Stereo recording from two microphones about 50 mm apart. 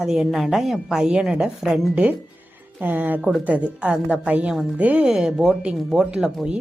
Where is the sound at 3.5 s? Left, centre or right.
Right.